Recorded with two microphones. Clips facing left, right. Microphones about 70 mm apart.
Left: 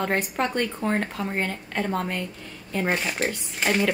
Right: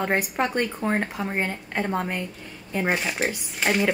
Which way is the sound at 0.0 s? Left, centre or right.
Centre.